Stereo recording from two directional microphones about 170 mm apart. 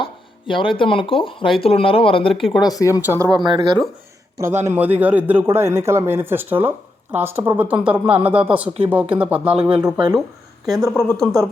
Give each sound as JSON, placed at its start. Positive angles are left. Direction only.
{"t": 0.0, "sound": "speech", "side_deg": 30}
{"t": 3.1, "sound": "speech", "side_deg": -20}
{"t": 4.6, "sound": "speech", "side_deg": -10}